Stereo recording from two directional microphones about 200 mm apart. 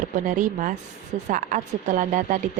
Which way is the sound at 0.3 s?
40° right (ahead or behind).